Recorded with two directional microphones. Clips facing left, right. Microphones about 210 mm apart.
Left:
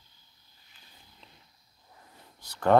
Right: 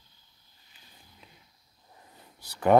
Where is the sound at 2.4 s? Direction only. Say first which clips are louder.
Right 1 dB; 10° right (ahead or behind).